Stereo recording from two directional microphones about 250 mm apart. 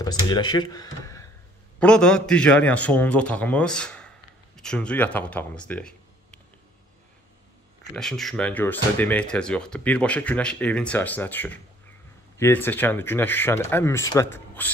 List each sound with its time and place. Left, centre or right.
0.0 s speech: centre
7.9 s speech: centre